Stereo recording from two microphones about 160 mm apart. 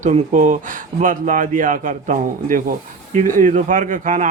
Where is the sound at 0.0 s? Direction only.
50° right (ahead or behind).